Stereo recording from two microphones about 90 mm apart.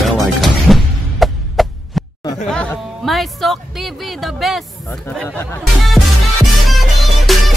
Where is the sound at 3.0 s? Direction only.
Centre (ahead or behind).